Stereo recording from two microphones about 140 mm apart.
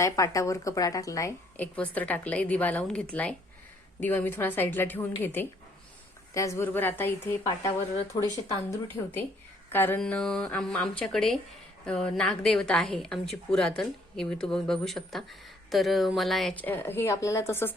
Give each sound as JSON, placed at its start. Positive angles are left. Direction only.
{"t": 0.0, "sound": "speech", "side_deg": 20}
{"t": 1.5, "sound": "a woman's voice", "side_deg": 10}
{"t": 8.1, "sound": "speech", "side_deg": 30}
{"t": 8.7, "sound": "a woman's voice", "side_deg": 15}